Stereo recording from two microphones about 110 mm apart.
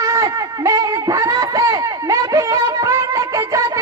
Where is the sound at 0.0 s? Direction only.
30° right (ahead or behind).